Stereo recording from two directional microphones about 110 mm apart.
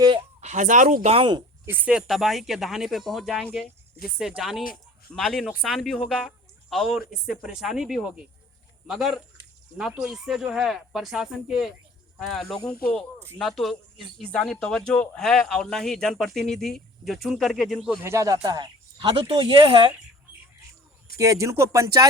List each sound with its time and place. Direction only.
1.2 s speech: 40° right (ahead or behind)
1.6 s speech: 20° right (ahead or behind)
1.9 s speech: 5° right (ahead or behind)
18.0 s speech: 25° right (ahead or behind)
18.4 s speech: 40° right (ahead or behind)
21.2 s speech: 30° right (ahead or behind)